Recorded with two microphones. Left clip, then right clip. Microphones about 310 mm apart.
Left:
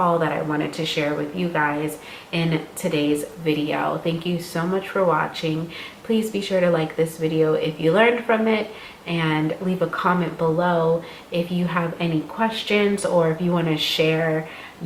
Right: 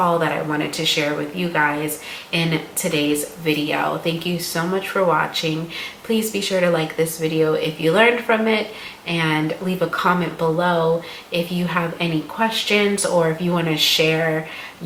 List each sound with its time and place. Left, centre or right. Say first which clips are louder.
0.2 s speech: right 2 dB; centre
10.4 s speech: right 1 dB; centre
11.3 s speech: right 2 dB; centre
13.1 s speech: right 1 dB; centre
13.6 s speech: right 6 dB; centre